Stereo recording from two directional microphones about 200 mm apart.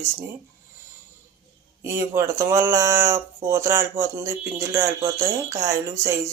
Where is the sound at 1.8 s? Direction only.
15° right (ahead or behind).